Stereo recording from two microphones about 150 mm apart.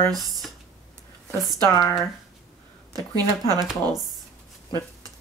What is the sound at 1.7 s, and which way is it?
Speech, 25° left (ahead or behind).